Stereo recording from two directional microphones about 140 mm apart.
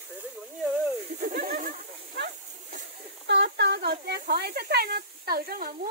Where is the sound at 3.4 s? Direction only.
90° right.